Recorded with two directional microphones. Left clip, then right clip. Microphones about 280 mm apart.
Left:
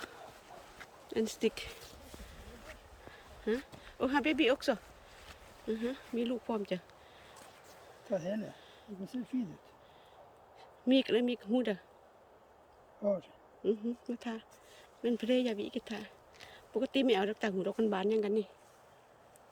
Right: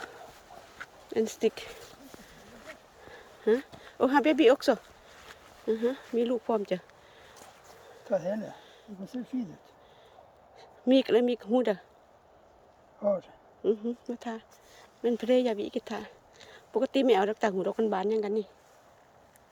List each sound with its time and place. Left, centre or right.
0.8 s a sound: centre
5.3 s speech: centre
8.0 s speech: centre
10.6 s speech: centre
13.1 s speech: centre